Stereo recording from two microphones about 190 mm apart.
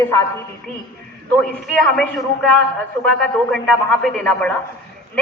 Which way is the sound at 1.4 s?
Centre (ahead or behind).